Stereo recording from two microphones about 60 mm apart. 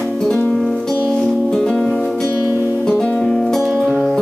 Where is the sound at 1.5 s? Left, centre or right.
Centre.